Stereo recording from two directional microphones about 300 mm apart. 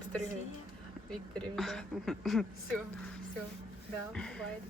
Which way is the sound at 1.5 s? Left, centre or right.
Centre.